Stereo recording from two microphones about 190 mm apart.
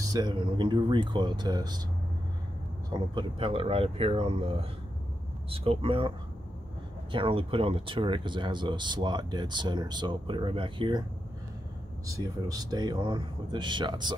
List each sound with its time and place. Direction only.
0.0 s speech: 20° right (ahead or behind)
2.9 s speech: 25° right (ahead or behind)
12.1 s speech: 20° right (ahead or behind)